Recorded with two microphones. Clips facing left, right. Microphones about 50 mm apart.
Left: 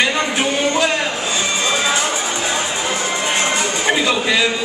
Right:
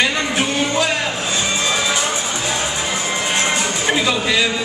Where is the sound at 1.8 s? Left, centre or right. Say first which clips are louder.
Left 1 dB; centre.